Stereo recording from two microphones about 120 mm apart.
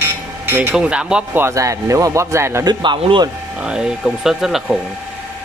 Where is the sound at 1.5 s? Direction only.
25° right (ahead or behind).